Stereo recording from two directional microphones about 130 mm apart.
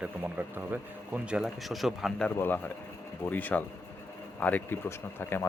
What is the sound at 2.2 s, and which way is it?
Speech, 15° left (ahead or behind).